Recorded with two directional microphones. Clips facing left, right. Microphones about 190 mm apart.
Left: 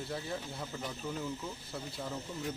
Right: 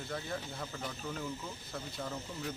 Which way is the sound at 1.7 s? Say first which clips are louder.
Right 1 dB; 5° left (ahead or behind).